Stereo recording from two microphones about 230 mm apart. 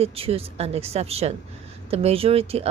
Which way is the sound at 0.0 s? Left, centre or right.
Right.